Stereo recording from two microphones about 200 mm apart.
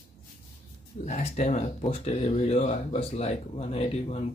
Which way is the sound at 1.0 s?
35° left (ahead or behind).